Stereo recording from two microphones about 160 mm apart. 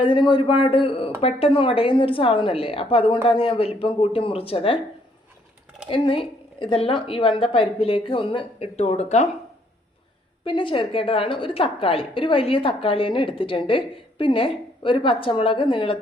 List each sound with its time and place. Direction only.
0.0 s a woman's voice: 30° left (ahead or behind)
5.9 s a woman's voice: 35° left (ahead or behind)
10.4 s a woman's voice: 30° left (ahead or behind)